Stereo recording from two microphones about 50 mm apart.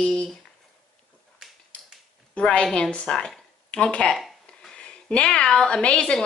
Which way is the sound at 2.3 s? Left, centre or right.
Left.